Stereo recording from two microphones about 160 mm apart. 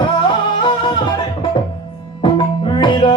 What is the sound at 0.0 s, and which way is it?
Music, 30° left (ahead or behind).